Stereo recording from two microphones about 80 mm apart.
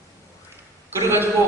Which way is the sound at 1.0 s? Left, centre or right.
Right.